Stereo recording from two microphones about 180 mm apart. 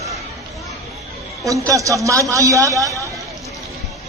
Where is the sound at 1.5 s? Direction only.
20° right (ahead or behind).